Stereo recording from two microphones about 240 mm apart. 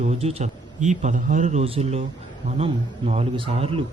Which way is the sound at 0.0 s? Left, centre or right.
Right.